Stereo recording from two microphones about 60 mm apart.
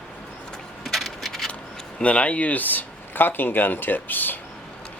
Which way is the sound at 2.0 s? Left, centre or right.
Left.